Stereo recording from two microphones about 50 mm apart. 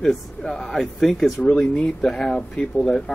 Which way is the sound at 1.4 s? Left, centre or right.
Centre.